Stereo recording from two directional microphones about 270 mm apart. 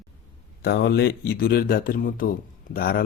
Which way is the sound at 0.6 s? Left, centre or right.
Left.